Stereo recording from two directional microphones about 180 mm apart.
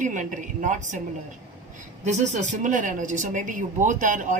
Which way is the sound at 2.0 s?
40° right (ahead or behind).